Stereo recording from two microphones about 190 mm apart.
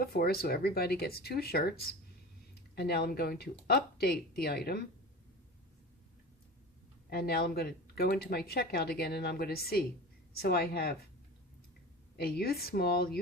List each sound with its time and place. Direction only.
0.0 s speech: 55° left (ahead or behind)
2.7 s speech: 60° left (ahead or behind)
7.1 s speech: 55° left (ahead or behind)
12.1 s speech: 55° left (ahead or behind)